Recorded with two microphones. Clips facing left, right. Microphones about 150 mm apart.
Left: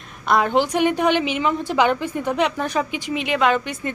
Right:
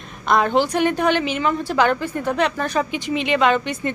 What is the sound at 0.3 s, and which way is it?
A woman's voice, 10° left (ahead or behind).